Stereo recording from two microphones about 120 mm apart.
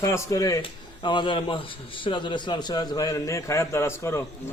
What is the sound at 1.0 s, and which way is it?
A man's voice, 40° left (ahead or behind).